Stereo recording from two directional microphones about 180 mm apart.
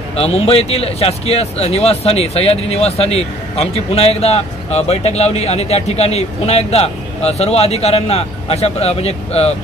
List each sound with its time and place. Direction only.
0.1 s speech: 35° left (ahead or behind)